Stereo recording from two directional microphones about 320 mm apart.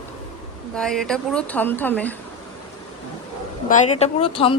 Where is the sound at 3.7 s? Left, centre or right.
Left.